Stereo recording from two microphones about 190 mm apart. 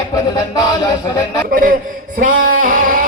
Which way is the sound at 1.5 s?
45° right (ahead or behind).